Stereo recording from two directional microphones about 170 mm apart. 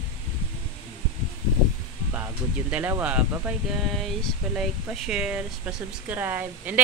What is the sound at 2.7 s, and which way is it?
Speech, 10° right (ahead or behind).